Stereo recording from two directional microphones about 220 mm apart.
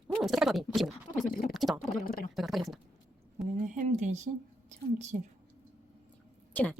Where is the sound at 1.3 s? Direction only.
40° left (ahead or behind).